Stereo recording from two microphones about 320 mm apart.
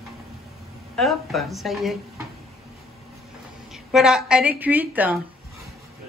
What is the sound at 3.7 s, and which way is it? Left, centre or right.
A woman's voice, centre.